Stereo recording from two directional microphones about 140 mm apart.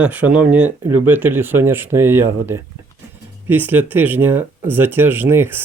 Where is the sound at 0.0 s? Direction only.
10° right (ahead or behind).